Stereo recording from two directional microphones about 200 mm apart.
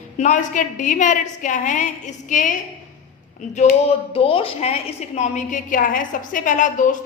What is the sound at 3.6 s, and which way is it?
A woman's voice, 30° left (ahead or behind).